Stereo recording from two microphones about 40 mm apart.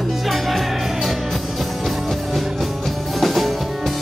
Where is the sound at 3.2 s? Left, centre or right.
Centre.